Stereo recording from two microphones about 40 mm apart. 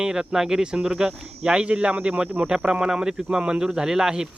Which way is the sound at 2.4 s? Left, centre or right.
Right.